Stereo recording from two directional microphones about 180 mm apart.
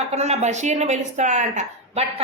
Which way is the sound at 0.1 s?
35° right (ahead or behind).